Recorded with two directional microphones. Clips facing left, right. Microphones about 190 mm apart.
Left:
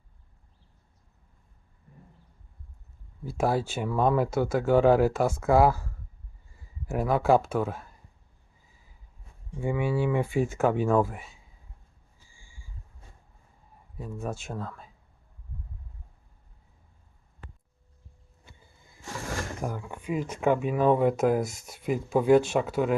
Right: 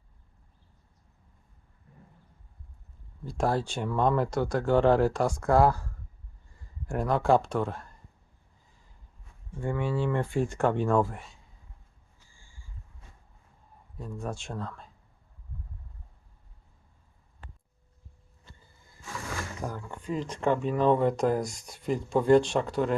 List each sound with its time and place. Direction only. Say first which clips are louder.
3.2 s speech: left 1 dB; 5° left (ahead or behind)
8.7 s a sound: left 1 dB; 5° left (ahead or behind)
9.5 s speech: left 2 dB; 10° left (ahead or behind)
12.3 s a sound: left 2 dB; 10° left (ahead or behind)
14.0 s speech: left 2 dB; 5° left (ahead or behind)
18.4 s vehicle: even; 15° left (ahead or behind)
19.6 s speech: left 2 dB; 10° left (ahead or behind)